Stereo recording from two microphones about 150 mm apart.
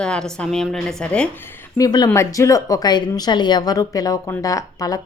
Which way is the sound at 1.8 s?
25° left (ahead or behind).